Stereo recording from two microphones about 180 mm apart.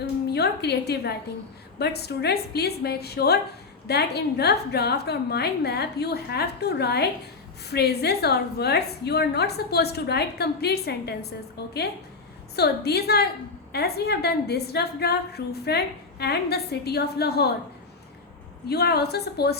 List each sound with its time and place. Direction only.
0.0 s a woman's voice: 65° left (ahead or behind)
18.7 s a woman's voice: 60° left (ahead or behind)